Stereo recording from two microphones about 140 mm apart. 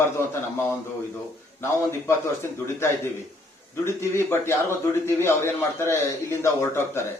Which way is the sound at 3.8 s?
15° left (ahead or behind).